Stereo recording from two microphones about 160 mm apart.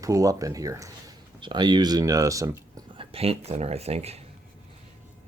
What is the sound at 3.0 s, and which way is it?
Speech, 40° right (ahead or behind).